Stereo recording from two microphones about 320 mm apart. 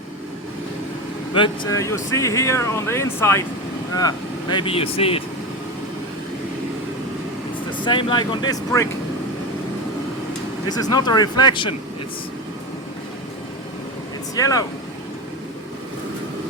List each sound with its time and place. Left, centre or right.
1.3 s speech: centre
7.9 s speech: centre
10.7 s speech: centre
14.3 s speech: centre